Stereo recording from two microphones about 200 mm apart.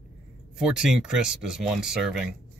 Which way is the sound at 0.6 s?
5° right (ahead or behind).